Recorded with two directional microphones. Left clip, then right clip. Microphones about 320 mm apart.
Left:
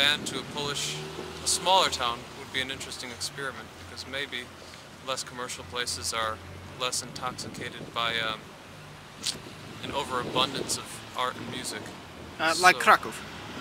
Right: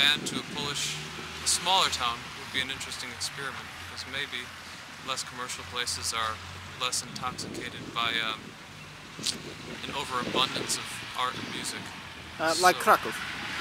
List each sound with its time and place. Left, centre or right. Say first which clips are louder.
0.0 s speech: even; centre
12.6 s speech: left 3 dB; left